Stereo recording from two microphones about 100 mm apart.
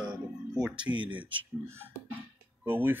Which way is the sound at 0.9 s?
30° right (ahead or behind).